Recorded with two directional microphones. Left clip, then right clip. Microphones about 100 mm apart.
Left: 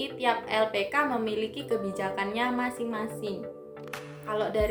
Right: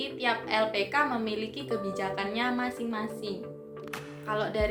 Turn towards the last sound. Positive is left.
turn(degrees=35)  # may be behind; listen again after turning